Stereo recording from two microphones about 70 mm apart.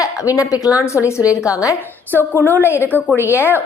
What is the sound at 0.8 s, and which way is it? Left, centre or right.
Speech, left.